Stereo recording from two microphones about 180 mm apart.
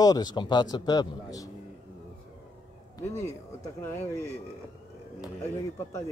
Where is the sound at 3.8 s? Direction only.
15° left (ahead or behind).